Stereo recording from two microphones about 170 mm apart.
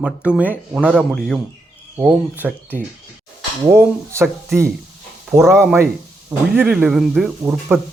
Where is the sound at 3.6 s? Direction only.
15° right (ahead or behind).